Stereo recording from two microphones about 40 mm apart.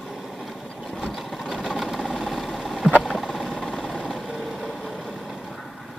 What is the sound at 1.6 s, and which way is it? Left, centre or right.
Sewing machine, centre.